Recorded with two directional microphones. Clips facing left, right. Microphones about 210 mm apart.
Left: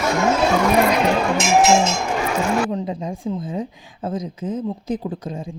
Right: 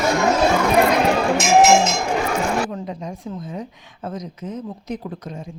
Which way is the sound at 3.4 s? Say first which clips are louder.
Left 4 dB; 30° left (ahead or behind).